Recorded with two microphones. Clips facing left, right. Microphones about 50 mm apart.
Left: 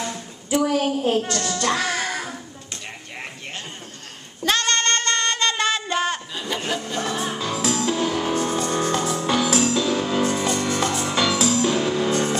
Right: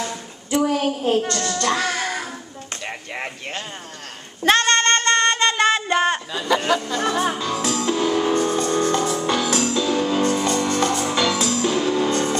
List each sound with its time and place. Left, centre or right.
0.5 s a child's voice: centre
4.4 s child singing: right
6.3 s a sound: right
7.3 s music: centre